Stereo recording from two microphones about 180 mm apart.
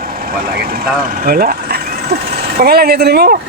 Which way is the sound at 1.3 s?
55° right (ahead or behind).